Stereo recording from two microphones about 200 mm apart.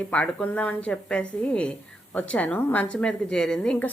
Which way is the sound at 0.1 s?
5° left (ahead or behind).